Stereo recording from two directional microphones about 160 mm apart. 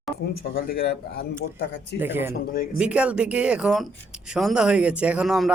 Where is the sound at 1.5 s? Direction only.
90° left.